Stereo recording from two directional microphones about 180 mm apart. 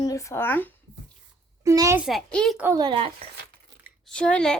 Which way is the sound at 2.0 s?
Centre (ahead or behind).